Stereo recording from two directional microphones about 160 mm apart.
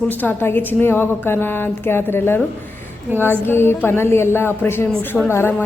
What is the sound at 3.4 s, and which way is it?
A woman's voice, 15° left (ahead or behind).